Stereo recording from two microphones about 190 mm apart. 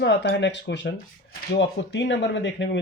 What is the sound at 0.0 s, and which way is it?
Speech, 65° left (ahead or behind).